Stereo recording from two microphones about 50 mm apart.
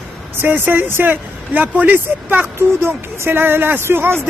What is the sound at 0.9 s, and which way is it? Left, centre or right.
Speech, right.